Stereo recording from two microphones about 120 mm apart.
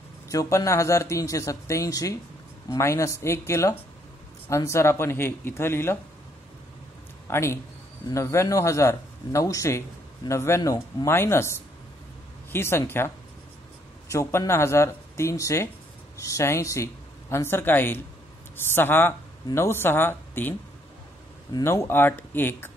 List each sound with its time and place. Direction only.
0.3 s a man's voice: 25° left (ahead or behind)
7.2 s a man's voice: 20° left (ahead or behind)
21.6 s a man's voice: 20° left (ahead or behind)